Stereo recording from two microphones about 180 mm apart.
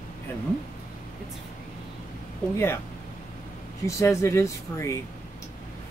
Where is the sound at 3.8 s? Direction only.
15° left (ahead or behind).